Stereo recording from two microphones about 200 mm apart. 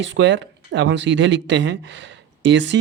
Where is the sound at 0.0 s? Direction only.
65° right (ahead or behind).